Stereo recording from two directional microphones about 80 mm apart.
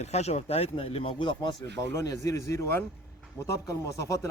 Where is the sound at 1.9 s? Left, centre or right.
Left.